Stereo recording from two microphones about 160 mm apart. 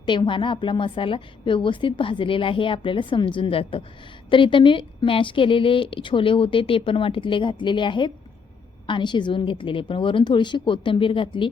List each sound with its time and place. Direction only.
0.0 s a woman's voice: 30° left (ahead or behind)